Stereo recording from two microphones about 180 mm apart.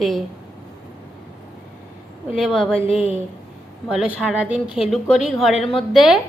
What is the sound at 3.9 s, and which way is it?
A woman's voice, 5° right (ahead or behind).